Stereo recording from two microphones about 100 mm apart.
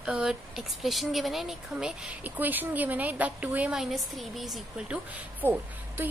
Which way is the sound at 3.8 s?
Centre (ahead or behind).